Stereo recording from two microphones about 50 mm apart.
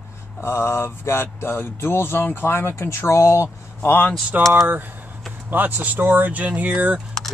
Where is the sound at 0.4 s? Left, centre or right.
Left.